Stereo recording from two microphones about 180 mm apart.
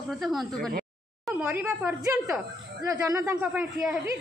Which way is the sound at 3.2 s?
10° right (ahead or behind).